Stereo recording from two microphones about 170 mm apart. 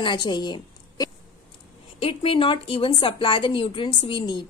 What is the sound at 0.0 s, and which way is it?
A woman's voice, 25° left (ahead or behind).